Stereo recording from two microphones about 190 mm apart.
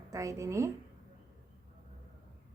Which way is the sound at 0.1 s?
15° right (ahead or behind).